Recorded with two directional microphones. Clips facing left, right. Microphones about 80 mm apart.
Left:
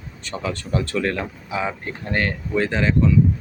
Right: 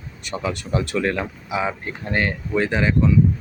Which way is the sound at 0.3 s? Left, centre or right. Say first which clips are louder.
Right 1 dB; centre.